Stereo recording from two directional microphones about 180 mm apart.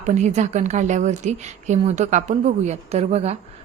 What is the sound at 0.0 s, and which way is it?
A woman's voice, 40° right (ahead or behind).